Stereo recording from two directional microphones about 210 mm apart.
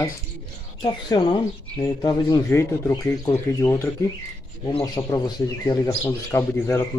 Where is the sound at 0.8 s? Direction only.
20° left (ahead or behind).